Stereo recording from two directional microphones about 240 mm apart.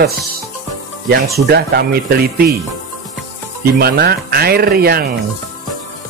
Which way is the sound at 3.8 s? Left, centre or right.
Right.